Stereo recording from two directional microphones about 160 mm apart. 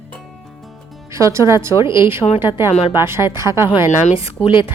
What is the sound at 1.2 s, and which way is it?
Speech, 20° right (ahead or behind).